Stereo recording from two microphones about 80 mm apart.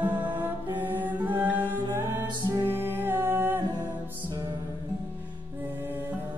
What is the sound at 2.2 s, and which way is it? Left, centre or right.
Music, right.